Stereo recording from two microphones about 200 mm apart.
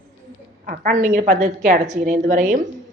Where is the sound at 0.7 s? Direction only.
45° right (ahead or behind).